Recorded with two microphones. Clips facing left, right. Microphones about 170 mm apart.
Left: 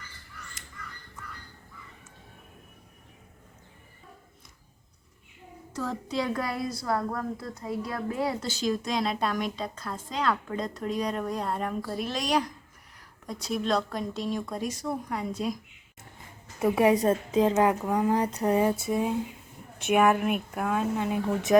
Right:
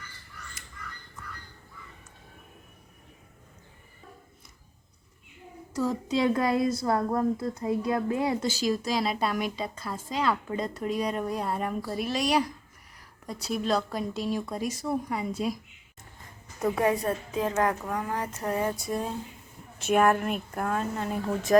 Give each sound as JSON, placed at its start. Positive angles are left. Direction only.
{"t": 5.7, "sound": "speech", "side_deg": -10}
{"t": 6.2, "sound": "speech", "side_deg": -25}
{"t": 8.5, "sound": "a woman's voice", "side_deg": -5}
{"t": 16.6, "sound": "a woman's voice", "side_deg": 10}
{"t": 18.8, "sound": "a woman's voice", "side_deg": 5}